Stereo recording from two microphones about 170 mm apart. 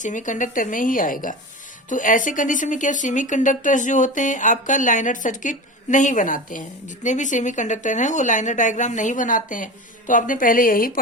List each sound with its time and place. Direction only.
0.0 s a woman's voice: 50° left (ahead or behind)